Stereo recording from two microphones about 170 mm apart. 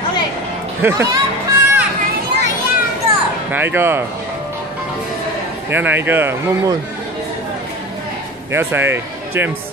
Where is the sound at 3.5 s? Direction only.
10° right (ahead or behind).